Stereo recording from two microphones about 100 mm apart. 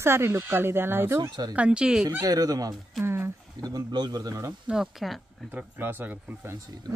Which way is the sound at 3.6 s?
45° right (ahead or behind).